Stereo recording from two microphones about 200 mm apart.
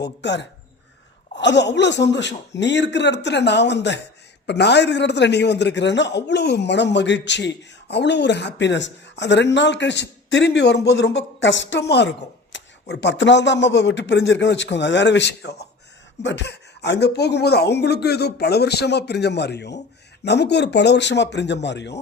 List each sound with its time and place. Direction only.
0.0 s speech: 60° left (ahead or behind)